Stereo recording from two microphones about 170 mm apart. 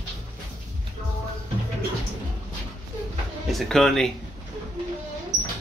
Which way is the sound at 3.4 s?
Centre (ahead or behind).